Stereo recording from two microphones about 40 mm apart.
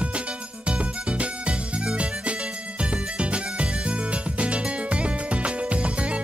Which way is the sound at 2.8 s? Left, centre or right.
Right.